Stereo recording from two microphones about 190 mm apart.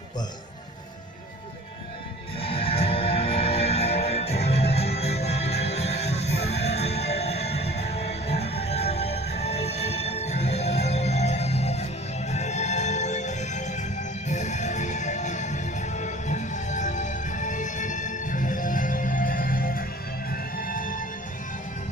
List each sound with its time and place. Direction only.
2.4 s music: 30° left (ahead or behind); by 21.1 s 45° left (ahead or behind)